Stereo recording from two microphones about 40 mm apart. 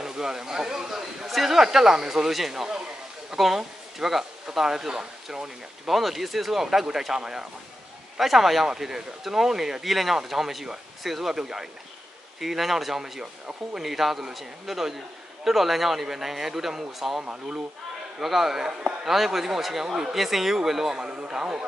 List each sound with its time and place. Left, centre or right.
0.0 s a sound: centre
1.3 s speech: centre
5.9 s speech: centre
8.2 s speech: centre
17.2 s speech: right
18.2 s speech: centre